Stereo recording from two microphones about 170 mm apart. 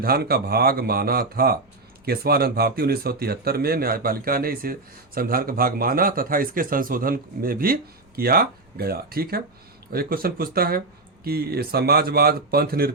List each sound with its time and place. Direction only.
0.0 s speech: 65° right (ahead or behind)